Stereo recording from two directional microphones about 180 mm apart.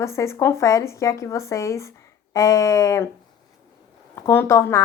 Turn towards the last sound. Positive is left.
turn(degrees=15)  # may be behind; listen again after turning